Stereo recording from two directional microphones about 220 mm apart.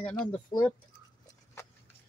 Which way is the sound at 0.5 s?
20° left (ahead or behind).